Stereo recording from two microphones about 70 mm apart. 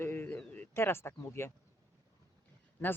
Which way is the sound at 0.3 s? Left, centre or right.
Left.